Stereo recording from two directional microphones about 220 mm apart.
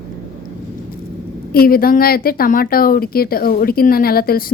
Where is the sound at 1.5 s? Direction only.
45° left (ahead or behind).